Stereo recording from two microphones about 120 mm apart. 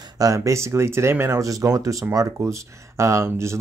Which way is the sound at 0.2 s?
25° right (ahead or behind).